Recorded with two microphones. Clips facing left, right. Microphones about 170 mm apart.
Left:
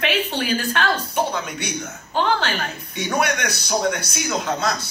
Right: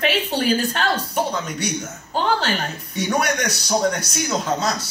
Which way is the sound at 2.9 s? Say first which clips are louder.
Right 1 dB; 40° right (ahead or behind).